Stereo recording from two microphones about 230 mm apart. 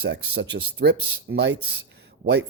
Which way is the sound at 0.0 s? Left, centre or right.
Right.